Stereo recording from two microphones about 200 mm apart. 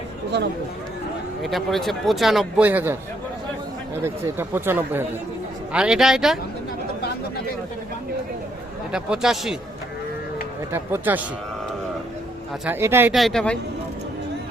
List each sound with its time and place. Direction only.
0.3 s speech: 55° right (ahead or behind)
1.4 s speech: centre (ahead or behind)
4.0 s speech: 10° right (ahead or behind)
8.9 s speech: 5° right (ahead or behind)
10.7 s speech: 10° right (ahead or behind)
12.6 s speech: 10° right (ahead or behind)
13.1 s speech: centre (ahead or behind)